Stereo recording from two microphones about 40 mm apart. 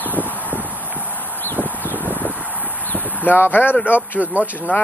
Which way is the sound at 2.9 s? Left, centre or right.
Left.